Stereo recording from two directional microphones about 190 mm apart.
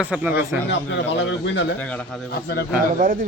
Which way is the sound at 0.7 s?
70° left (ahead or behind).